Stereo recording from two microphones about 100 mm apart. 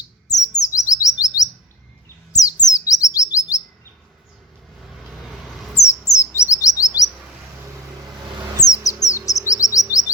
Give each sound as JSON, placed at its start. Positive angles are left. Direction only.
{"t": 0.0, "sound": "chirp", "side_deg": 40}
{"t": 2.3, "sound": "bird", "side_deg": 40}
{"t": 5.7, "sound": "bird", "side_deg": 30}
{"t": 7.0, "sound": "chirp", "side_deg": 35}
{"t": 8.6, "sound": "a sound", "side_deg": 35}
{"t": 9.5, "sound": "chirp", "side_deg": 35}